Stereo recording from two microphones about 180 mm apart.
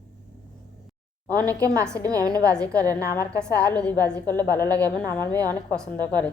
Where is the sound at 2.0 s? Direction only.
20° right (ahead or behind).